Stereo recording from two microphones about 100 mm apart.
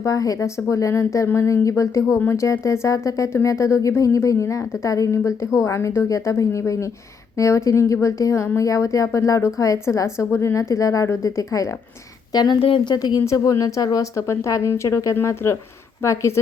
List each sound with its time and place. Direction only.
0.0 s a woman's voice: 35° left (ahead or behind)
12.3 s speech: 45° left (ahead or behind)
12.5 s speech: 60° left (ahead or behind)
12.9 s a woman's voice: 40° left (ahead or behind)